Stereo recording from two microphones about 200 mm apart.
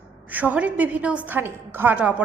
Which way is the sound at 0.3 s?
10° right (ahead or behind).